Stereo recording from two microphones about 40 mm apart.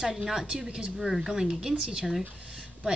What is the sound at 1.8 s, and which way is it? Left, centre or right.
Speech, right.